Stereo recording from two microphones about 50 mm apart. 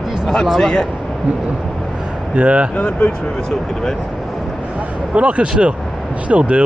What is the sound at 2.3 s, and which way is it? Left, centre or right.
Speech, right.